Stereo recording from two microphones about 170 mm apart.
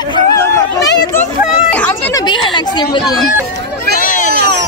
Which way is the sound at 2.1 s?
30° left (ahead or behind).